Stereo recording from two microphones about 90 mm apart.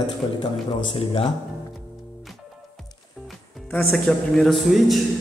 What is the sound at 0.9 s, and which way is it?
Speech, 90° left.